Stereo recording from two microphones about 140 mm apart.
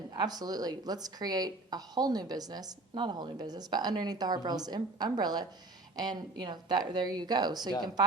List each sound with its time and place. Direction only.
0.1 s speech: 30° right (ahead or behind)